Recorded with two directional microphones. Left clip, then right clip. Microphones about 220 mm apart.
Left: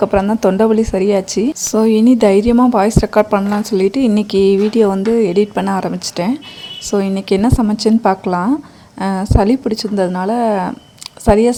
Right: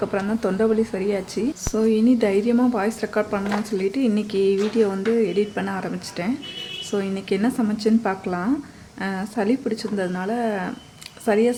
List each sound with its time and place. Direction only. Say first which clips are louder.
0.0 s a woman's voice: left 11 dB; 30° left (ahead or behind)